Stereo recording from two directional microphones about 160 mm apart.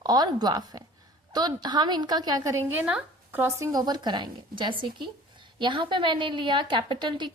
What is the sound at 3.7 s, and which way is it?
A woman's voice, 25° right (ahead or behind).